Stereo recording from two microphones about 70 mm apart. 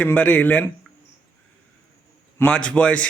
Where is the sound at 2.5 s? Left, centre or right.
Centre.